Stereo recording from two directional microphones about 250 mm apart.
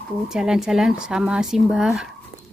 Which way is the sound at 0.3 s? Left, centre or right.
Centre.